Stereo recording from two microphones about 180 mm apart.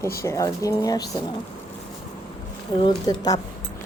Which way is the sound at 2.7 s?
25° left (ahead or behind).